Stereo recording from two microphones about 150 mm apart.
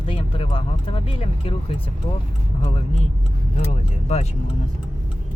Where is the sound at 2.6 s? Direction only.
40° left (ahead or behind).